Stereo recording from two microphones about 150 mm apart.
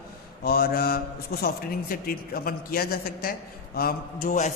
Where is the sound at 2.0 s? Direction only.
80° left; by 4.5 s 55° left (ahead or behind).